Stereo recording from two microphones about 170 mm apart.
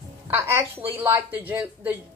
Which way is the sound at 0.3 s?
15° right (ahead or behind).